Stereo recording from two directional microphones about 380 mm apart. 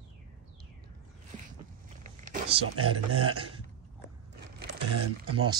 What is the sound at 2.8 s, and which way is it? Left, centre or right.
Speech, right.